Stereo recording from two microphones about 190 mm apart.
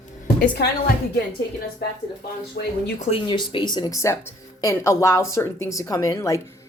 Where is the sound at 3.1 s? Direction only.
25° left (ahead or behind).